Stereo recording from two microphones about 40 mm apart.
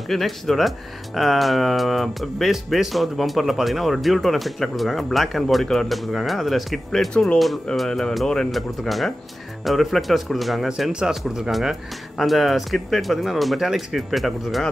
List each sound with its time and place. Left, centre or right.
0.1 s speech: centre
10.9 s speech: centre
12.2 s speech: centre